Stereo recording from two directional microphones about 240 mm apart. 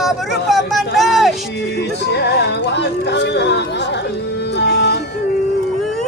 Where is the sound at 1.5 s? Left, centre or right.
Left.